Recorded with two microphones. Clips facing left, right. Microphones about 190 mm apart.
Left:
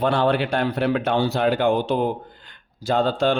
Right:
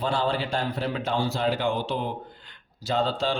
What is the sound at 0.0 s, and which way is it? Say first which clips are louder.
Speech: left 6 dB; 60° left (ahead or behind).